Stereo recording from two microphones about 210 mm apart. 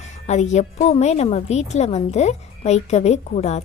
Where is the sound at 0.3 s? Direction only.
35° left (ahead or behind).